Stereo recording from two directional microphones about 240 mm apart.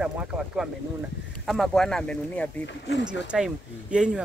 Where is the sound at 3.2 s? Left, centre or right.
Centre.